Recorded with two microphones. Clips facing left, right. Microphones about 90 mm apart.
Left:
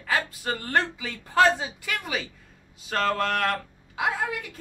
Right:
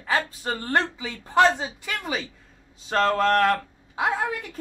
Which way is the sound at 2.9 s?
30° right (ahead or behind).